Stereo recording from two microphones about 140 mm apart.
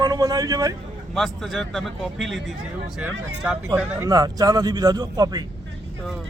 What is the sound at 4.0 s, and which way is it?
A man's voice, 30° right (ahead or behind).